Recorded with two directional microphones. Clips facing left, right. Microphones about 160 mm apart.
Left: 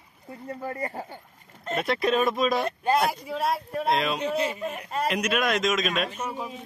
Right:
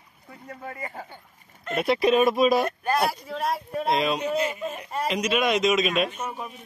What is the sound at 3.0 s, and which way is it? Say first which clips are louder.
Speech: even; 5° left (ahead or behind).